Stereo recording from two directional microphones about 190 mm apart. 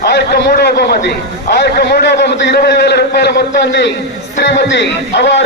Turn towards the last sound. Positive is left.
turn(degrees=65)  # may be behind; listen again after turning